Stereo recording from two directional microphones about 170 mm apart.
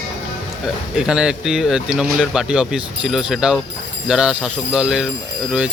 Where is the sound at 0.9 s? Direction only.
5° right (ahead or behind).